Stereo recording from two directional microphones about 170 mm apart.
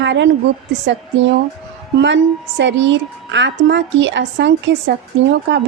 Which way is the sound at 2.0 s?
90° right.